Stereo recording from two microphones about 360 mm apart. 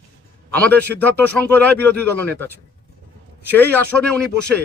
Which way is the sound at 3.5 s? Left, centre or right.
Centre.